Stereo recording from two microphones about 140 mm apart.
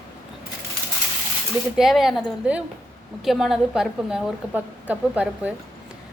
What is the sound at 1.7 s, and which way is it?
A woman's voice, centre (ahead or behind).